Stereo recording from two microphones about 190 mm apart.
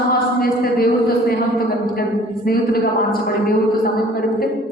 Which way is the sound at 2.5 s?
50° left (ahead or behind).